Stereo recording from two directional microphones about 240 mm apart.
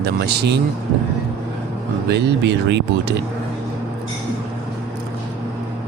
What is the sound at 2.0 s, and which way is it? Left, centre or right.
Speech, right.